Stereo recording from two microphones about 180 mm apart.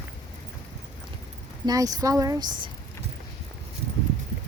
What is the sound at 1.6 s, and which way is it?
Speech, 20° right (ahead or behind).